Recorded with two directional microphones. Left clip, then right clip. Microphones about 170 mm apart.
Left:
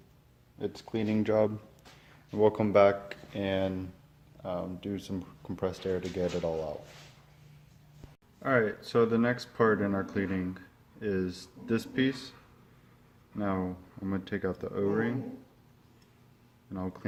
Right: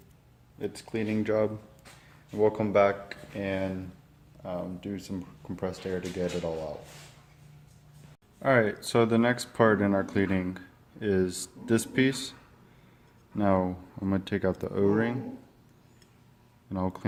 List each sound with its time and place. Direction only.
0.6 s speech: 30° left (ahead or behind)
8.4 s speech: 55° right (ahead or behind)
13.3 s speech: 60° right (ahead or behind)
16.7 s speech: 60° right (ahead or behind)